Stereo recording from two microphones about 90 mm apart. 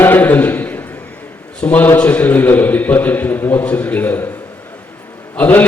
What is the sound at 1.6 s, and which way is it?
A man's voice, 20° left (ahead or behind).